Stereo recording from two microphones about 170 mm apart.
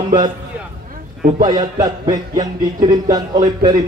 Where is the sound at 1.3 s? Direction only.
25° right (ahead or behind).